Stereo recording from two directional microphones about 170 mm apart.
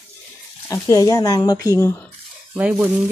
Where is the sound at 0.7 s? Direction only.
20° left (ahead or behind).